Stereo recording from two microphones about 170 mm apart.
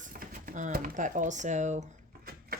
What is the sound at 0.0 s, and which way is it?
A woman's voice, 55° right (ahead or behind).